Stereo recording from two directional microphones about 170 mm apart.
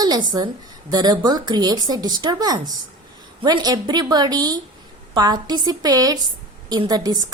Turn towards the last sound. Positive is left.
turn(degrees=-25)  # may be behind; listen again after turning